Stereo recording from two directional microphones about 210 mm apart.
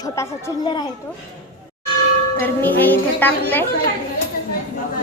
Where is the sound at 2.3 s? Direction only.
10° left (ahead or behind).